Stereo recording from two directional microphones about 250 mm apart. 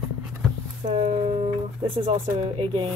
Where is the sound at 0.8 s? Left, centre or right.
Right.